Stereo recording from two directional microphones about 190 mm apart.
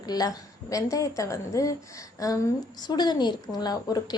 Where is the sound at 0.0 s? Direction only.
20° left (ahead or behind).